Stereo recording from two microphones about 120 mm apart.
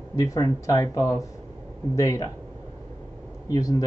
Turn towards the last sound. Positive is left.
turn(degrees=30)  # may be behind; listen again after turning